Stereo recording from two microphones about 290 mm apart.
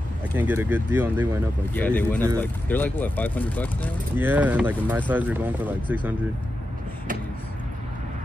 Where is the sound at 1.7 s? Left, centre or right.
Centre.